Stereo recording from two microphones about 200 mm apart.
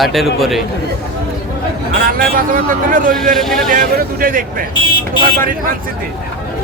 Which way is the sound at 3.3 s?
Centre (ahead or behind).